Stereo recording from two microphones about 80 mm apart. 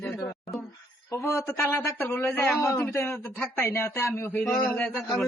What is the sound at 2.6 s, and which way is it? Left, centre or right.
Speech, left.